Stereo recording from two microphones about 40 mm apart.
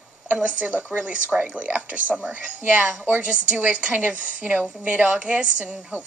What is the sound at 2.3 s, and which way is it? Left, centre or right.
Speech, right.